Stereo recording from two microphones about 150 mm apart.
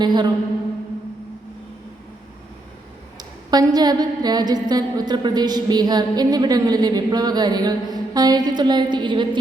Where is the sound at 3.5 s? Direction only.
25° right (ahead or behind).